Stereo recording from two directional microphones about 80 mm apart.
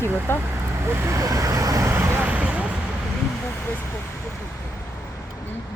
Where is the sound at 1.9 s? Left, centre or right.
Right.